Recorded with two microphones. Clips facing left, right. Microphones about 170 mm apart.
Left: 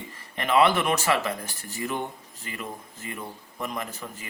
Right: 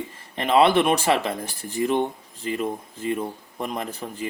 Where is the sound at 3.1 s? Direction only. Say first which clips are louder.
Right 10 dB; 30° right (ahead or behind).